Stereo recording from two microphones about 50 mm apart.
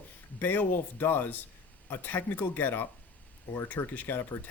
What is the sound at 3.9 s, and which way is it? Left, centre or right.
Speech, left.